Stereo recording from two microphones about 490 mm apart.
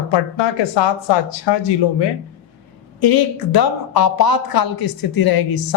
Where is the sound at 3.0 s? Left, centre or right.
Left.